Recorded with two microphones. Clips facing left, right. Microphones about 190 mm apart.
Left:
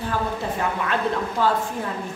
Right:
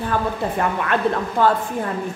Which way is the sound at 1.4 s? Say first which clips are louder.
Right 5 dB; 55° right (ahead or behind).